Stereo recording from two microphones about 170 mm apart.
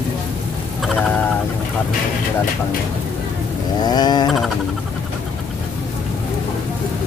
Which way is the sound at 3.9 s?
25° left (ahead or behind).